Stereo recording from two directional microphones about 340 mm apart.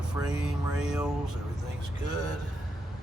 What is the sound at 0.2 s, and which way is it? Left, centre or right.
Speech, centre.